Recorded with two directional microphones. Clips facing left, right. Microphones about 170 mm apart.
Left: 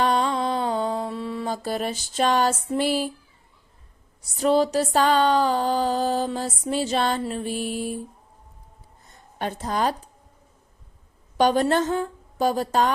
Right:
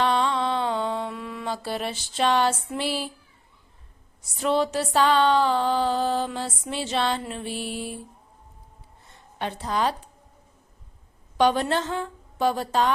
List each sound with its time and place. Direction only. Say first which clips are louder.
0.0 s mantra: left 1 dB; 40° left (ahead or behind)
4.2 s a sound: left 4 dB; 35° left (ahead or behind)
9.0 s a woman's voice: left 2 dB; 45° left (ahead or behind)
11.3 s a woman's voice: left 2 dB; 45° left (ahead or behind)